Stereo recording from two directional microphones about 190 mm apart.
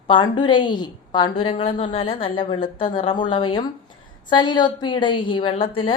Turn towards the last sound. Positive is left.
turn(degrees=25)  # may be behind; listen again after turning